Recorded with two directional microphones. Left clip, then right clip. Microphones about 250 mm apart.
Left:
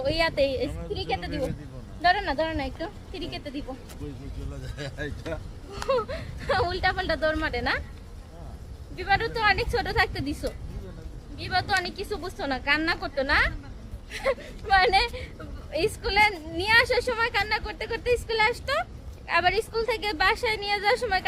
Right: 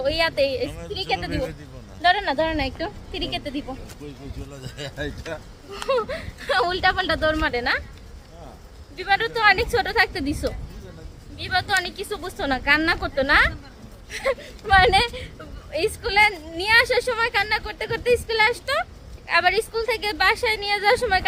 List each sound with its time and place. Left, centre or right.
0.0 s a woman's voice: centre
4.6 s speech: right
5.7 s a woman's voice: centre
9.0 s a woman's voice: centre